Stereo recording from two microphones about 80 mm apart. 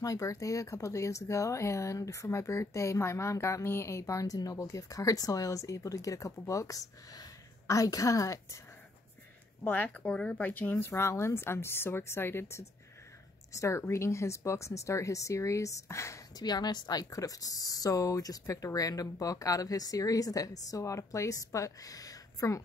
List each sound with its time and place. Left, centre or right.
0.0 s speech: left
9.7 s speech: left
10.9 s speech: left
16.3 s speech: left